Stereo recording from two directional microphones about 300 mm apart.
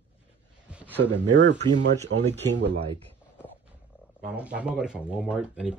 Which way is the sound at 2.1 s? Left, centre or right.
Right.